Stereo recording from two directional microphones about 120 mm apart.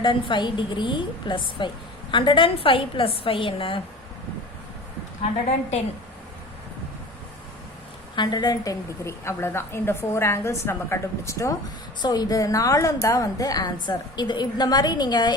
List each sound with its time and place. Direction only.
0.0 s a woman's voice: 45° left (ahead or behind)
8.1 s a woman's voice: 40° left (ahead or behind)